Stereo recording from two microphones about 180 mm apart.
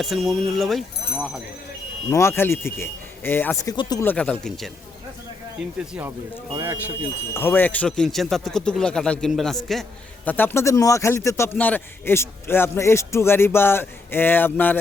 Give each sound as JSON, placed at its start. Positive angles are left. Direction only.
{"t": 0.0, "sound": "speech", "side_deg": 0}
{"t": 2.0, "sound": "a man's voice", "side_deg": 15}
{"t": 3.8, "sound": "speech", "side_deg": 20}
{"t": 4.0, "sound": "speech", "side_deg": 10}
{"t": 5.9, "sound": "speech", "side_deg": -10}
{"t": 7.3, "sound": "a man's voice", "side_deg": 10}